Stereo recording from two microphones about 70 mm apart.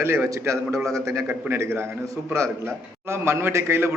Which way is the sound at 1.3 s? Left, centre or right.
Right.